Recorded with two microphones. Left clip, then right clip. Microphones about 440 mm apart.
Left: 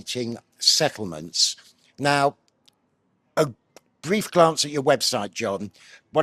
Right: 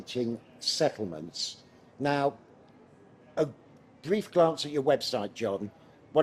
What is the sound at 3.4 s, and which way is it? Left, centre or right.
Speech, left.